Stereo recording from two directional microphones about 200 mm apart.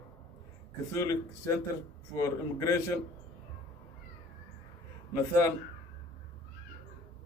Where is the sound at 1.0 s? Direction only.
15° left (ahead or behind).